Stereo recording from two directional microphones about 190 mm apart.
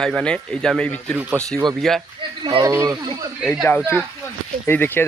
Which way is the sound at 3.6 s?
5° left (ahead or behind).